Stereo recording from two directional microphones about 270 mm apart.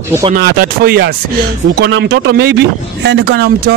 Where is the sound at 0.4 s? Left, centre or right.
Right.